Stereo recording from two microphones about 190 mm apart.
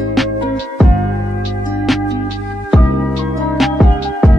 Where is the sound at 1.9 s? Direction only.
Centre (ahead or behind).